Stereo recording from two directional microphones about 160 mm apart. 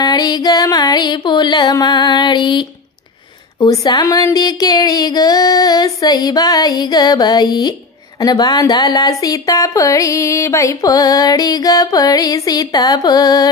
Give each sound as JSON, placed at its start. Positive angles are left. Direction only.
{"t": 0.0, "sound": "speech", "side_deg": 25}